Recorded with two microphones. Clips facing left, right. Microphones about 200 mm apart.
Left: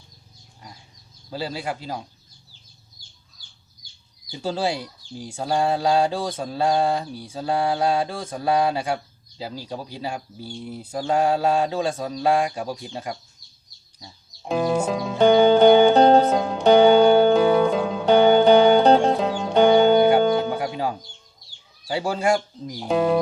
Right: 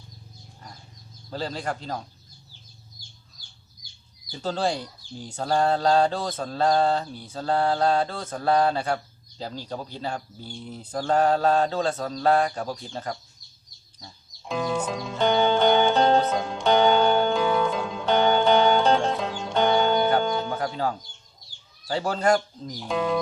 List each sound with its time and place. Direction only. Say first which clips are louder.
1.3 s speech: left 1 dB; 10° left (ahead or behind)
4.3 s speech: left 1 dB; 10° left (ahead or behind)
14.4 s music: left 5 dB; 40° left (ahead or behind)
16.8 s music: left 6 dB; 10° left (ahead or behind)
17.2 s music: left 6 dB; 40° left (ahead or behind)
19.7 s music: left 6 dB; 10° left (ahead or behind)
21.8 s speech: left 1 dB; 10° left (ahead or behind)
22.8 s speech: left 6 dB; 40° left (ahead or behind)